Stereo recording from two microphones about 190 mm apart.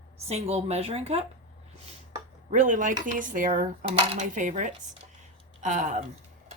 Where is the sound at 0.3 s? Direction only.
35° right (ahead or behind).